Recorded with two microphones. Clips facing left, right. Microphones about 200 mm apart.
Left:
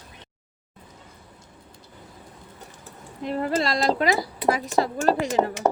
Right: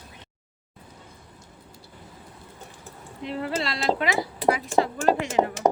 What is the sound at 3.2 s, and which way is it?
Speech, 45° left (ahead or behind).